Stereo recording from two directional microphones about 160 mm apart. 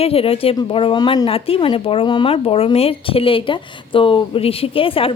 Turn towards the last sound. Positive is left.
turn(degrees=35)  # may be behind; listen again after turning